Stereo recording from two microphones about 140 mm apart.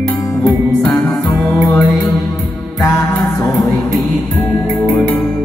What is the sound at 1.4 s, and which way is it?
Music, 15° left (ahead or behind).